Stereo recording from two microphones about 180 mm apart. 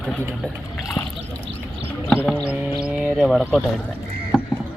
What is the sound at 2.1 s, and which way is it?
Music, 10° right (ahead or behind).